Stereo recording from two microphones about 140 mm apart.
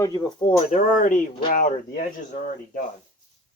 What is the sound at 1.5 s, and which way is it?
Speech, 75° left (ahead or behind).